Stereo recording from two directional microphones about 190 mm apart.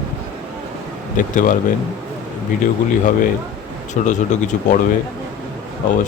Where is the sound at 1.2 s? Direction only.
45° left (ahead or behind).